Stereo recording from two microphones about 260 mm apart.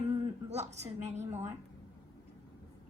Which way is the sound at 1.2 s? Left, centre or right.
Centre.